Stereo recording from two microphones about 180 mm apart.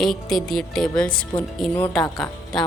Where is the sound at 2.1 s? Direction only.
20° left (ahead or behind).